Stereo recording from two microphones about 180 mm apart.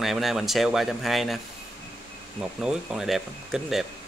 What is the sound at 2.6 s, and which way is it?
Speech, 5° right (ahead or behind).